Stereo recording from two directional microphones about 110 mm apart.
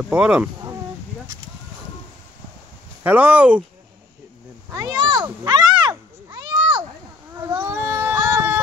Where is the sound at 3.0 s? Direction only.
15° right (ahead or behind).